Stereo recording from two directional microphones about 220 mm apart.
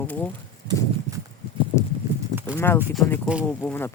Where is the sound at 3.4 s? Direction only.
10° left (ahead or behind).